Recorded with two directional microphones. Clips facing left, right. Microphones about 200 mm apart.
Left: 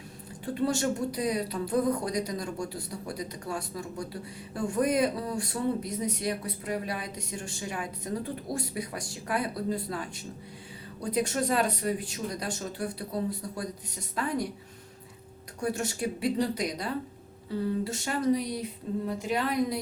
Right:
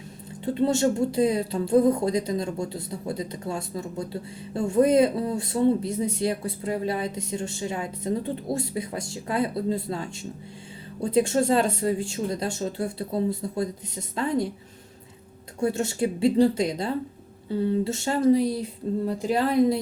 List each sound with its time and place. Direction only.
0.4 s a woman's voice: 25° right (ahead or behind)
15.6 s a woman's voice: 25° right (ahead or behind)